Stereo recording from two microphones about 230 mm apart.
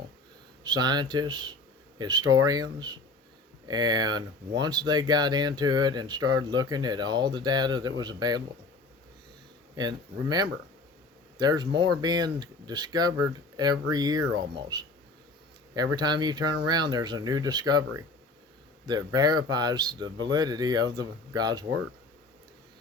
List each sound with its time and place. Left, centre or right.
0.6 s speech: centre
9.7 s speech: centre